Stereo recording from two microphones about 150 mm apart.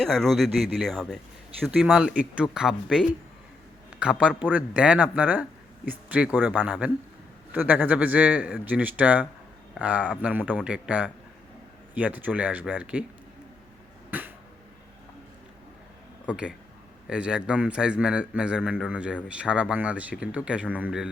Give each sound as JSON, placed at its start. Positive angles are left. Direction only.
{"t": 0.0, "sound": "a man's voice", "side_deg": 5}
{"t": 14.1, "sound": "a sound", "side_deg": -10}
{"t": 16.2, "sound": "a man's voice", "side_deg": -5}